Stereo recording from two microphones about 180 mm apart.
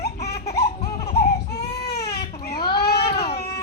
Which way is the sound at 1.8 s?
65° left (ahead or behind).